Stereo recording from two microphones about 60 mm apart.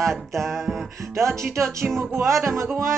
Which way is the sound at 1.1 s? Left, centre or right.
Right.